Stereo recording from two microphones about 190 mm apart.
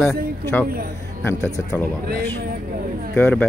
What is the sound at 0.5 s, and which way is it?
A man's voice, 10° left (ahead or behind).